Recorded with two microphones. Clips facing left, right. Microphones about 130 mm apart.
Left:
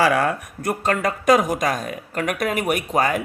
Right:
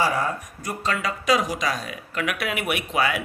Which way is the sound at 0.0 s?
75° left (ahead or behind).